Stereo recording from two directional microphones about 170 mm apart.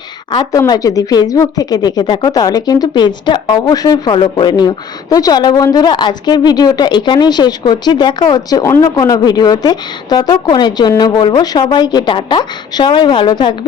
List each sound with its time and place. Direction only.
0.3 s speech: 20° left (ahead or behind)